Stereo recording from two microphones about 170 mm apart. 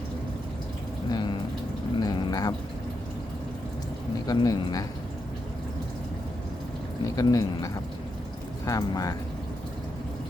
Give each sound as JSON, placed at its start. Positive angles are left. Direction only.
{"t": 1.1, "sound": "a sound", "side_deg": 25}
{"t": 4.3, "sound": "speech", "side_deg": 20}
{"t": 7.2, "sound": "speech", "side_deg": 20}